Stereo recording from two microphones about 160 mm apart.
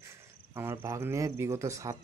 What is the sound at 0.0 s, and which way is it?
Speech, 15° right (ahead or behind).